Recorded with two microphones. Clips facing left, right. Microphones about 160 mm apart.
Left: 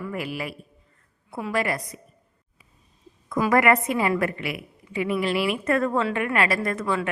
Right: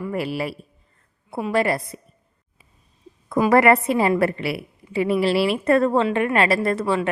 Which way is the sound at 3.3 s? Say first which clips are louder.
Right 4 dB; 30° right (ahead or behind).